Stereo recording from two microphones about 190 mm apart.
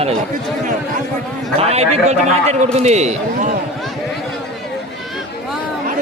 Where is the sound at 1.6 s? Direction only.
35° right (ahead or behind).